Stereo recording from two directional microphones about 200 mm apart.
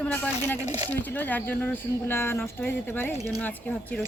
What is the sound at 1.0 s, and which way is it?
Speech, 10° left (ahead or behind).